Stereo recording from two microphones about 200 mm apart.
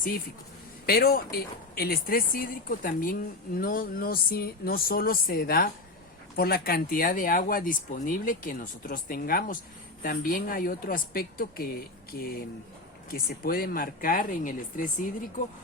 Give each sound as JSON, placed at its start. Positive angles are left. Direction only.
{"t": 0.9, "sound": "speech", "side_deg": 50}